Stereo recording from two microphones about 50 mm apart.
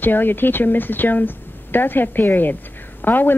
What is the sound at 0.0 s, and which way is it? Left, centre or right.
A woman's voice, left.